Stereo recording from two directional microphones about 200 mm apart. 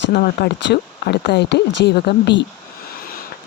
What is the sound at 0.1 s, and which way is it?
Speech, 50° left (ahead or behind).